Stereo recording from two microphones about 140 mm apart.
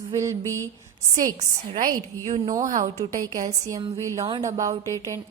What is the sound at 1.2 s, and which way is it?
A woman's voice, 70° right (ahead or behind).